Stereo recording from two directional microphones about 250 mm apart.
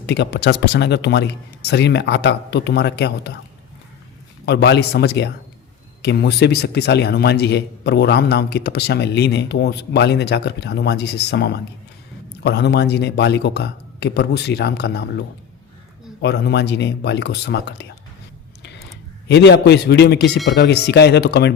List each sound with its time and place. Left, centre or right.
0.0 s speech: left
4.4 s a man's voice: left
16.2 s speech: left
19.3 s a man's voice: left